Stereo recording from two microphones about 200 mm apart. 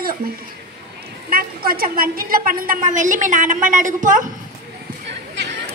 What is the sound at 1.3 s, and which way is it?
A woman's voice, 50° right (ahead or behind).